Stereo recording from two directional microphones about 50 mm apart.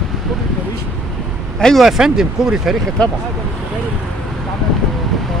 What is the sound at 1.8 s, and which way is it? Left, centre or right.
Speech, centre.